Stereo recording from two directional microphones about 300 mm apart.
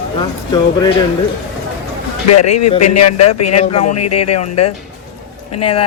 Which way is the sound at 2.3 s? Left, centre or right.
Left.